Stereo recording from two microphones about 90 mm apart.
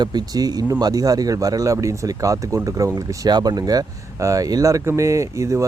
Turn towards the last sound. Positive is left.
turn(degrees=-35)  # may be behind; listen again after turning